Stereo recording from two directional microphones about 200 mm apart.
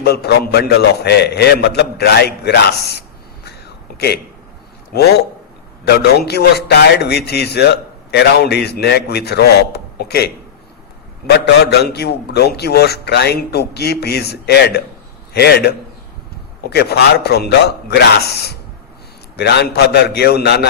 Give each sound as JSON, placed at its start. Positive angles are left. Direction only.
{"t": 0.0, "sound": "a man's voice", "side_deg": 55}
{"t": 11.6, "sound": "a man's voice", "side_deg": 55}
{"t": 19.4, "sound": "a man's voice", "side_deg": 55}